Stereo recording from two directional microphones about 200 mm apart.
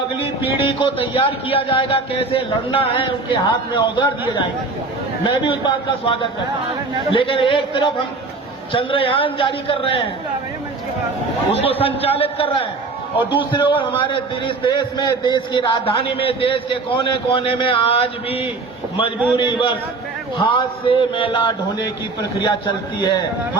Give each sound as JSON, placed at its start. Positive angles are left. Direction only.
{"t": 0.5, "sound": "a man's voice", "side_deg": 25}
{"t": 5.2, "sound": "a man's voice", "side_deg": 25}
{"t": 11.6, "sound": "a man's voice", "side_deg": 30}